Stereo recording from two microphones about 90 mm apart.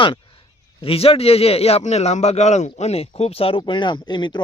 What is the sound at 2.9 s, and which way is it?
Speech, 90° left.